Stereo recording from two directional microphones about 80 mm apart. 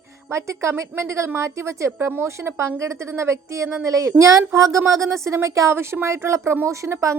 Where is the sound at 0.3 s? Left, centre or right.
Right.